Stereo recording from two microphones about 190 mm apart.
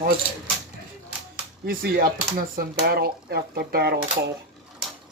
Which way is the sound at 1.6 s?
50° right (ahead or behind).